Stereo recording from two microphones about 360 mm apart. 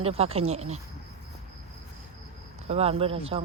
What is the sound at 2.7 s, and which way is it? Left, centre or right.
Speech, centre.